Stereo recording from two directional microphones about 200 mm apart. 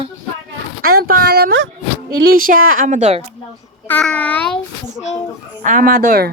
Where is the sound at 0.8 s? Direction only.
90° right.